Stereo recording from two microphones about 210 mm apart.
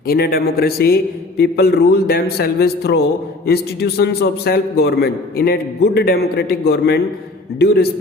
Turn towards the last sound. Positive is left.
turn(degrees=50)  # may be behind; listen again after turning